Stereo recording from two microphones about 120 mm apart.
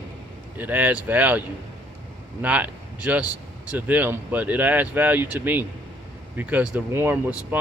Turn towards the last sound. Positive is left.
turn(degrees=-15)  # may be behind; listen again after turning